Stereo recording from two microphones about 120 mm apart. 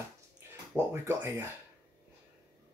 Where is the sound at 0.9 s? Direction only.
20° right (ahead or behind).